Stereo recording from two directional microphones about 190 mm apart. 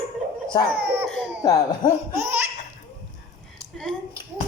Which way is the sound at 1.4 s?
20° left (ahead or behind).